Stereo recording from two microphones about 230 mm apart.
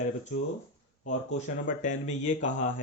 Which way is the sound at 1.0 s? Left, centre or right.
Left.